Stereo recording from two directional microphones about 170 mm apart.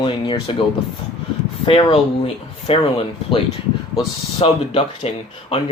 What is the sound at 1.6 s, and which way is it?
Speech, 30° left (ahead or behind).